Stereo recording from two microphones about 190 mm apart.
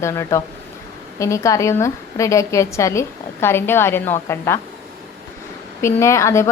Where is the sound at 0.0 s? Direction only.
15° left (ahead or behind).